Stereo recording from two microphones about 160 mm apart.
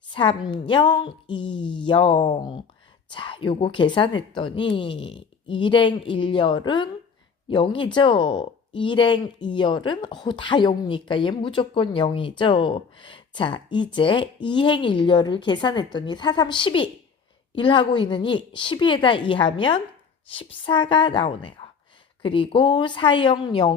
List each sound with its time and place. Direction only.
0.1 s a woman's voice: 30° left (ahead or behind)